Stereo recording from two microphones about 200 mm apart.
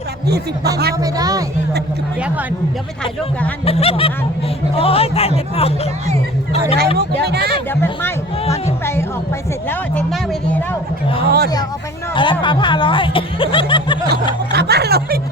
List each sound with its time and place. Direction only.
0.3 s speech: 55° right (ahead or behind)
0.9 s speech: 20° right (ahead or behind)
3.7 s a man's voice: 30° left (ahead or behind)
6.7 s speech: 55° right (ahead or behind)
7.7 s speech: 10° left (ahead or behind)
8.8 s music: 10° left (ahead or behind)
9.6 s vehicle: 5° left (ahead or behind)
11.3 s speech: 50° right (ahead or behind)
12.1 s speech: 25° left (ahead or behind)
14.5 s snicker: 55° right (ahead or behind)